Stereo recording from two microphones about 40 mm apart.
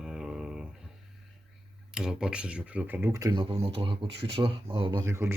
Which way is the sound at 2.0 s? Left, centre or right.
Centre.